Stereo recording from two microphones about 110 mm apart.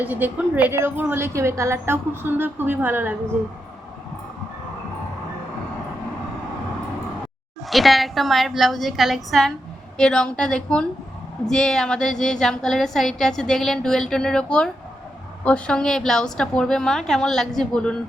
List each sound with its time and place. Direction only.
0.0 s a woman's voice: 15° right (ahead or behind)
7.7 s a woman's voice: centre (ahead or behind)